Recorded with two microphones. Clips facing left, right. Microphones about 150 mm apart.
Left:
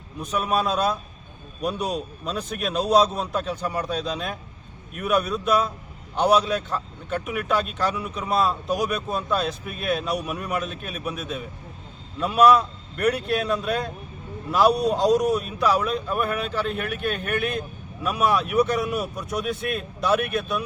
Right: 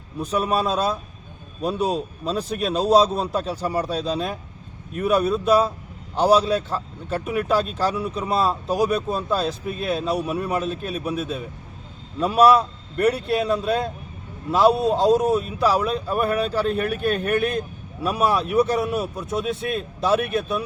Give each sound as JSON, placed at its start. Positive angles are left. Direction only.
{"t": 0.2, "sound": "a man's voice", "side_deg": -30}